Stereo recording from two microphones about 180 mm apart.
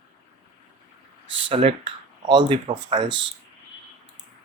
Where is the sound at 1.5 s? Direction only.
30° right (ahead or behind).